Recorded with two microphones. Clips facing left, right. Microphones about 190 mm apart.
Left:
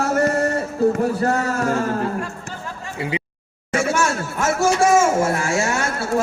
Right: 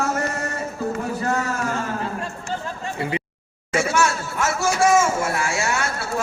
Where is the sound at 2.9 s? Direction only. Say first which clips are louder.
Left 1 dB; 15° left (ahead or behind).